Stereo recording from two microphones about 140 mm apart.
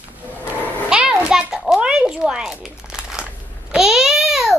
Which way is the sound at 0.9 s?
5° right (ahead or behind).